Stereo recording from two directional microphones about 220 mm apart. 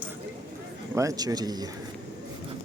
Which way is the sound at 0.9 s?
15° right (ahead or behind).